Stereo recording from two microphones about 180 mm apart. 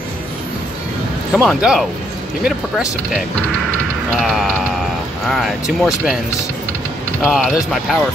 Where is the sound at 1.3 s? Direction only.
Centre (ahead or behind).